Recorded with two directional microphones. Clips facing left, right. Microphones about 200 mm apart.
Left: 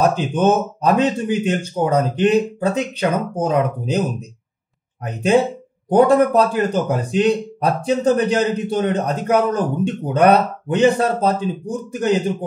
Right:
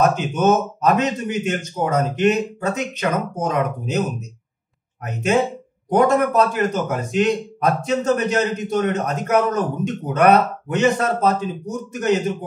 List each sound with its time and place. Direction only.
0.0 s a man's voice: 30° left (ahead or behind)
5.0 s a man's voice: 35° left (ahead or behind)